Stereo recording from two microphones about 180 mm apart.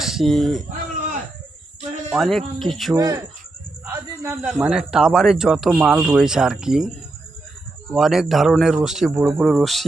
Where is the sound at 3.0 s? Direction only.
20° right (ahead or behind).